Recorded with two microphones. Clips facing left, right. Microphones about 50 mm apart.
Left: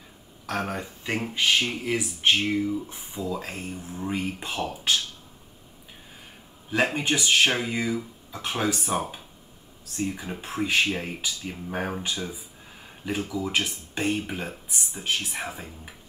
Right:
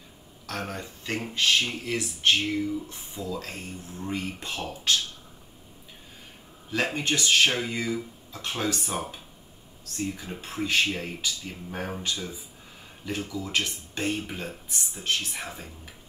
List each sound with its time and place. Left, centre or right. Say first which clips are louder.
0.5 s speech: left 4 dB; centre
6.7 s speech: left 3 dB; centre